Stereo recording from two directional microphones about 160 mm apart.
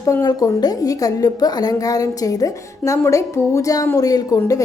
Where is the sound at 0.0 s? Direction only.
20° left (ahead or behind).